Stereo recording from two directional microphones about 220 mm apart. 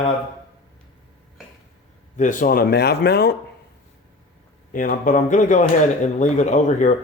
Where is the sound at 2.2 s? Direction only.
35° left (ahead or behind).